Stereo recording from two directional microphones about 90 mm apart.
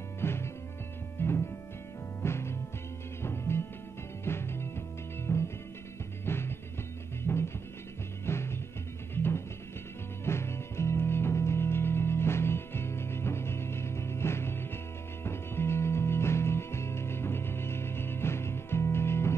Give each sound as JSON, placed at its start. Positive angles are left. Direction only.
{"t": 0.2, "sound": "music", "side_deg": 25}